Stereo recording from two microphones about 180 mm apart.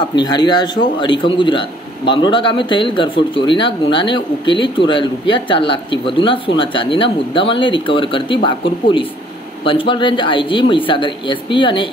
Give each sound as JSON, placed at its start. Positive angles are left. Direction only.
{"t": 0.1, "sound": "a man's voice", "side_deg": 25}